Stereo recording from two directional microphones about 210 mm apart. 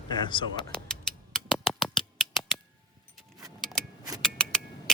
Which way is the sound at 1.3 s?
Centre (ahead or behind).